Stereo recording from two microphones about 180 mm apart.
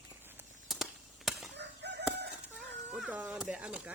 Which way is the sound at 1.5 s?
70° right (ahead or behind).